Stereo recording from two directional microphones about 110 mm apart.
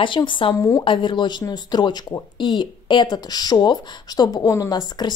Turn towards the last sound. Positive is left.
turn(degrees=40)  # may be behind; listen again after turning